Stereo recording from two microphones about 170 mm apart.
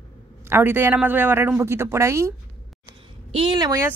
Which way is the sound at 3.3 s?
30° right (ahead or behind).